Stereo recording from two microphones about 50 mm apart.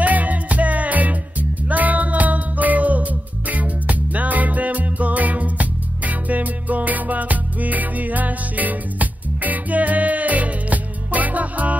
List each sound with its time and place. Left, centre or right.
0.0 s music: right